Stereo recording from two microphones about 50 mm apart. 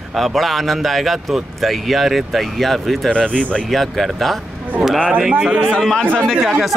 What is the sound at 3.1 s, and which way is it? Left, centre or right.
Speech, left.